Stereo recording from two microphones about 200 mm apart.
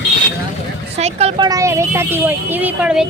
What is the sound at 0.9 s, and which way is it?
Speech, 30° right (ahead or behind).